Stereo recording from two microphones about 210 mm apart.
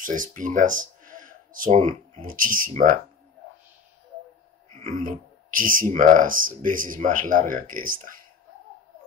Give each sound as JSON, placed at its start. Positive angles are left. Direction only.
{"t": 0.0, "sound": "speech", "side_deg": -40}
{"t": 4.9, "sound": "speech", "side_deg": -40}